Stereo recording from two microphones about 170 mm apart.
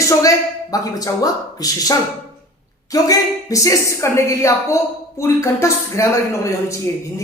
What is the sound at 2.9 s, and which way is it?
A woman's voice, 20° left (ahead or behind).